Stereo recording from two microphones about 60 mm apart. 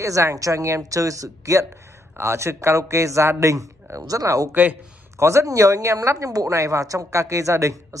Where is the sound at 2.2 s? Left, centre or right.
Right.